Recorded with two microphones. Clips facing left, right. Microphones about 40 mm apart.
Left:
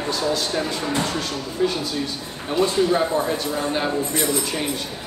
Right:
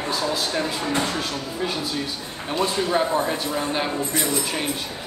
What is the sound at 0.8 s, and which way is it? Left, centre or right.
Speech, right.